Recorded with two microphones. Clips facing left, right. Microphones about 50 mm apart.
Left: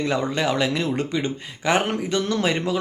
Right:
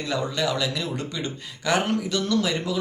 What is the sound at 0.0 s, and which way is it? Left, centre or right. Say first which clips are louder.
Speech: left 3 dB; left.